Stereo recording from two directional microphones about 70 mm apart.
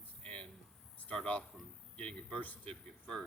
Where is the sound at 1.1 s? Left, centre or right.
Centre.